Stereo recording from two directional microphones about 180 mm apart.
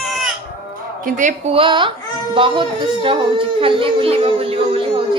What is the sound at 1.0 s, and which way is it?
Speech, 45° right (ahead or behind).